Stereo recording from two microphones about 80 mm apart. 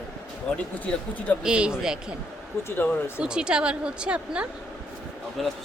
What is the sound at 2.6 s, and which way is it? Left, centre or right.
Speech, left.